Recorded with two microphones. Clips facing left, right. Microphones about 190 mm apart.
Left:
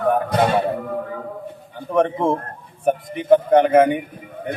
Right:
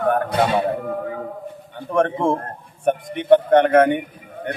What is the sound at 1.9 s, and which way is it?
A man's voice, centre (ahead or behind).